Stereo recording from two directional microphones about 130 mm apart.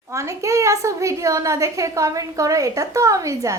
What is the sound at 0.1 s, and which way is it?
A woman's voice, 25° right (ahead or behind).